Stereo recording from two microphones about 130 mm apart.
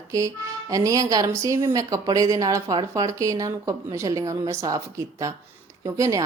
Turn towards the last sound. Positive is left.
turn(degrees=-25)  # may be behind; listen again after turning